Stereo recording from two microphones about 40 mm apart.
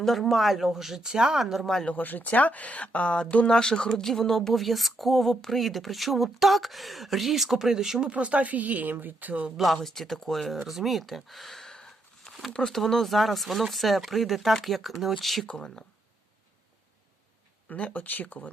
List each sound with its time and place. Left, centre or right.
0.0 s speech: centre
1.9 s speech: left; by 8.0 s centre
8.0 s speech: right
9.8 s speech: centre
11.9 s a sound: centre
12.6 s speech: centre
15.4 s speech: centre
17.7 s speech: left
17.9 s speech: left